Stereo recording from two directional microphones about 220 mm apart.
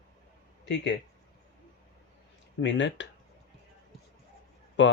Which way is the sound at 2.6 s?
55° left (ahead or behind).